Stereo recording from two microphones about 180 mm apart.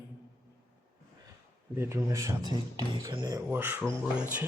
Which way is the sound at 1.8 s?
15° right (ahead or behind).